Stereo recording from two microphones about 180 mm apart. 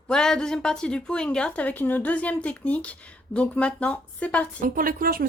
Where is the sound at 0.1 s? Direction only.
5° left (ahead or behind).